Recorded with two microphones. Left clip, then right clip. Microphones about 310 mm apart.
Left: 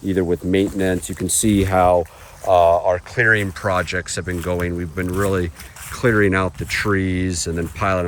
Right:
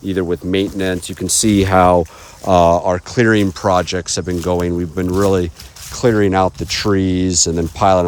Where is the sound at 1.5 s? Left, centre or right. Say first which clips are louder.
Right 4 dB; right.